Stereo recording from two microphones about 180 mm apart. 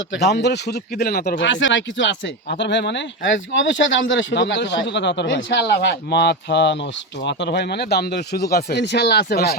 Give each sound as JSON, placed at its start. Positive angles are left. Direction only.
{"t": 0.1, "sound": "speech", "side_deg": 70}